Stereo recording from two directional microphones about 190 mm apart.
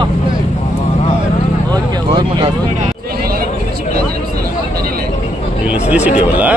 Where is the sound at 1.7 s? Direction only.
20° right (ahead or behind).